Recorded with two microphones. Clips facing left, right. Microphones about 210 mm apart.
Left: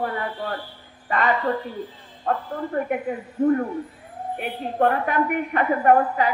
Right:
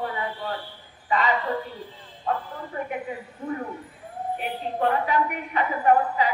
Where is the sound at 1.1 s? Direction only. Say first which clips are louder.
Left 2 dB; 55° left (ahead or behind).